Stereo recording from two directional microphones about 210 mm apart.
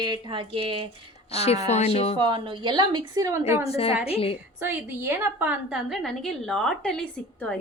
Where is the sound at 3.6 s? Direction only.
30° left (ahead or behind).